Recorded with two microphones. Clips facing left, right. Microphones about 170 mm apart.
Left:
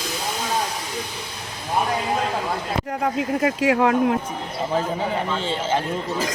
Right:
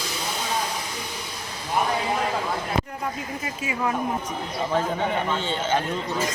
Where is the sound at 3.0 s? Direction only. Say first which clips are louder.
Left 9 dB; 70° left (ahead or behind).